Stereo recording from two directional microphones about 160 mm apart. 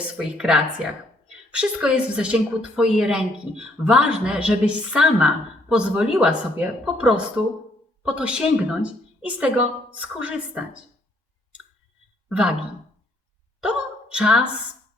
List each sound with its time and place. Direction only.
0.3 s a woman's voice: 5° right (ahead or behind)
12.3 s a woman's voice: 5° right (ahead or behind)
13.6 s hiccup: 5° right (ahead or behind)